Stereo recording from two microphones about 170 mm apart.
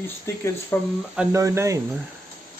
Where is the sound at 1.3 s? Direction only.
20° right (ahead or behind).